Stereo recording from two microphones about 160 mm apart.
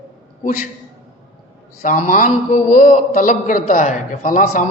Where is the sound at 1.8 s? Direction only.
55° left (ahead or behind).